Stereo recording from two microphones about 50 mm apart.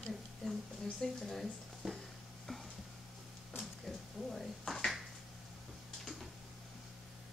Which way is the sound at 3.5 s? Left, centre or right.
Left.